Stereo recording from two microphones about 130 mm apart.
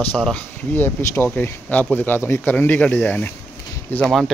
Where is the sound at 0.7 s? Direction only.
15° left (ahead or behind).